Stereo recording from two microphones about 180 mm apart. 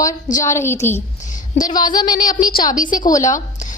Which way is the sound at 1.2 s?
45° left (ahead or behind).